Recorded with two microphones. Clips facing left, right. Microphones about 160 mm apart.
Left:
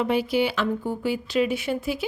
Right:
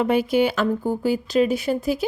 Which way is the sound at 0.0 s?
50° right (ahead or behind).